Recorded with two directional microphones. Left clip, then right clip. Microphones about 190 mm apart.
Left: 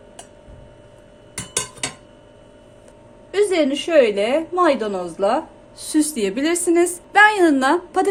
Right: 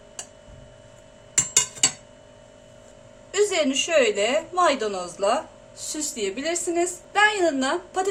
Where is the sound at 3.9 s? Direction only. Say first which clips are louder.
Left 5 dB; 25° left (ahead or behind).